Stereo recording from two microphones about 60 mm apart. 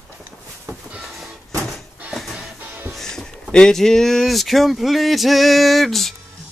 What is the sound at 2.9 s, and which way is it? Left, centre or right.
Music, centre.